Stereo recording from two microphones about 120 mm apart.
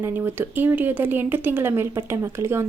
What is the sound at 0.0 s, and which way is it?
Speech, 15° right (ahead or behind).